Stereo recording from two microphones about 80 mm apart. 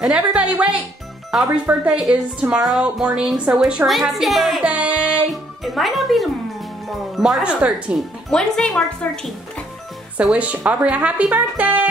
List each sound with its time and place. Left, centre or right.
0.0 s speech: centre
1.3 s a woman's voice: centre
4.6 s music: centre
5.3 s a woman's voice: centre
7.4 s speech: centre
8.3 s a woman's voice: centre
10.3 s speech: centre